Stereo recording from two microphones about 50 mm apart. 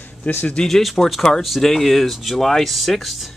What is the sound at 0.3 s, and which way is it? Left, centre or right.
Speech, left.